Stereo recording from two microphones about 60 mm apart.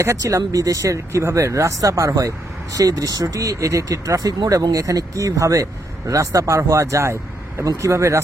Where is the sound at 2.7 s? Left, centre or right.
Right.